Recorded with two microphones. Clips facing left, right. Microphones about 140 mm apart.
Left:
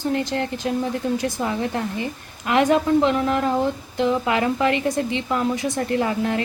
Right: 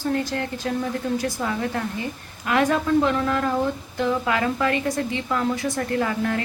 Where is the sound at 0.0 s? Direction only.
20° left (ahead or behind).